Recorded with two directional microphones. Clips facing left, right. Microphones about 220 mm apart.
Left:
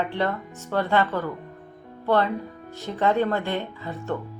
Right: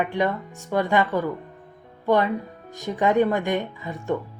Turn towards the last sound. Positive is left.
turn(degrees=-15)  # may be behind; listen again after turning